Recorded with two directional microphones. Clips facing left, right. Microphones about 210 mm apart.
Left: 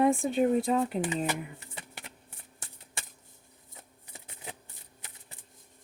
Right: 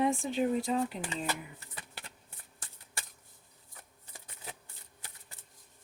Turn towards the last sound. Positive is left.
turn(degrees=20)  # may be behind; listen again after turning